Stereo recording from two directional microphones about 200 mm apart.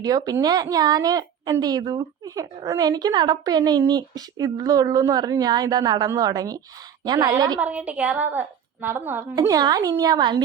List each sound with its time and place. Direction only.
0.0 s a woman's voice: 20° right (ahead or behind)
7.6 s a woman's voice: 5° right (ahead or behind)